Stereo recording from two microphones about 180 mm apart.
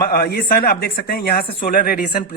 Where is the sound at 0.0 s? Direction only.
60° left (ahead or behind).